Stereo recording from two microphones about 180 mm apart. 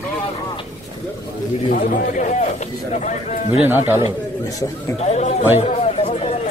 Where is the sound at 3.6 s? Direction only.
10° right (ahead or behind).